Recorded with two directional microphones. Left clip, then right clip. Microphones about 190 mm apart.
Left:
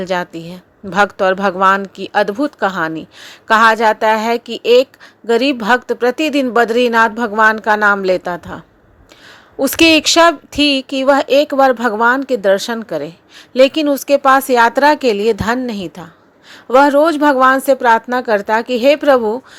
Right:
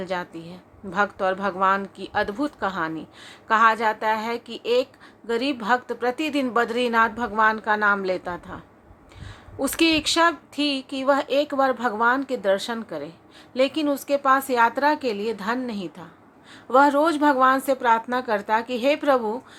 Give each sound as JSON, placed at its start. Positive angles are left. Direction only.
{"t": 0.0, "sound": "a woman's voice", "side_deg": 35}